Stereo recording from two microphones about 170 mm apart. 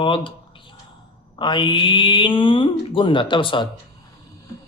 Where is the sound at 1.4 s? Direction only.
30° left (ahead or behind).